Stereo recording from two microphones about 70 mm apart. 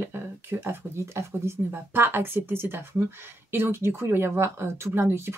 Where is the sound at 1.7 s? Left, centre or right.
Right.